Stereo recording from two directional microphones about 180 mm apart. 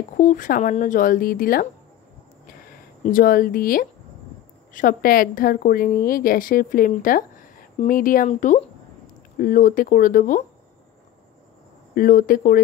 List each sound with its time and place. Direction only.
0.2 s speech: 45° left (ahead or behind)
3.0 s a woman's voice: 50° left (ahead or behind)
11.9 s speech: 50° left (ahead or behind)